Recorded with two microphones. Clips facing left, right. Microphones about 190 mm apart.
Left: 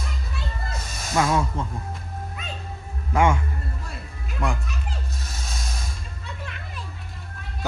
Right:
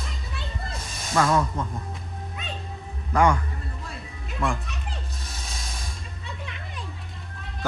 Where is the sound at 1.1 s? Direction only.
10° left (ahead or behind).